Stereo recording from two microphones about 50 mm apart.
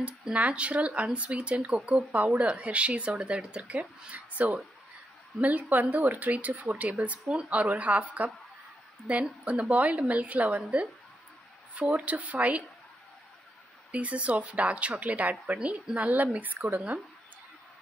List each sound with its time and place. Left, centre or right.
0.0 s speech: right
11.7 s speech: right
13.9 s speech: right